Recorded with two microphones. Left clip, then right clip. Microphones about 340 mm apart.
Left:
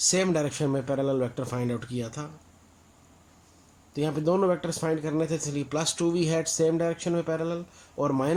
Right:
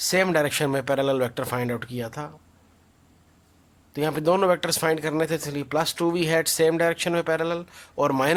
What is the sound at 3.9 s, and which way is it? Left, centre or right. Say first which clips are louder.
Speech: right 4 dB; right.